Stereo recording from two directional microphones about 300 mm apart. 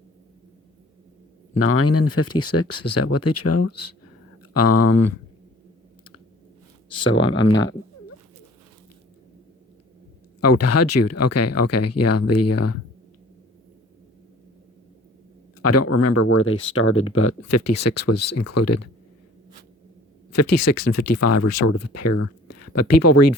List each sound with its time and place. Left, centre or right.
1.5 s speech: left
7.0 s speech: left
10.4 s speech: left
15.6 s speech: left
20.3 s speech: left